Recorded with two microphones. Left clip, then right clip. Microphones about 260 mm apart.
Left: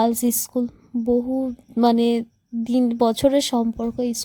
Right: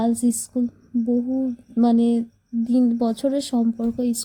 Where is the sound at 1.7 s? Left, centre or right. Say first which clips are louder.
Left 2 dB; left.